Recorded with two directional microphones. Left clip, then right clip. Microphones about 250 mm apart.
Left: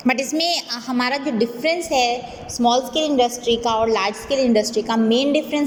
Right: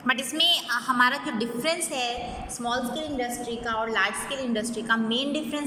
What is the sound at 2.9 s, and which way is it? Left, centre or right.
Speech, left.